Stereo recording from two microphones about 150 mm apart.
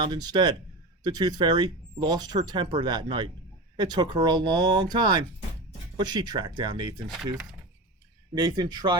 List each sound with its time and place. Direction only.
0.0 s speech: 30° right (ahead or behind)
8.4 s speech: 30° right (ahead or behind)